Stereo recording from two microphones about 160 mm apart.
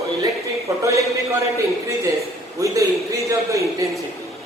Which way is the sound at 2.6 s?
20° right (ahead or behind).